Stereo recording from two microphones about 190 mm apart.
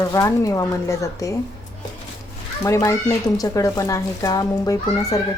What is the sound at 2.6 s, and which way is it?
Speech, 15° left (ahead or behind).